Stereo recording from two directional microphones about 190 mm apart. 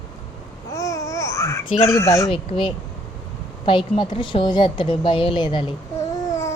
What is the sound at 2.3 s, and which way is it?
Speech, 25° left (ahead or behind).